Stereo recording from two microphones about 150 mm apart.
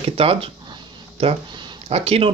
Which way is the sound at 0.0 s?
40° right (ahead or behind).